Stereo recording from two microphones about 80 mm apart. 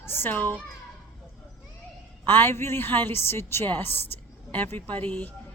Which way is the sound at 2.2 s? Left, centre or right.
Left.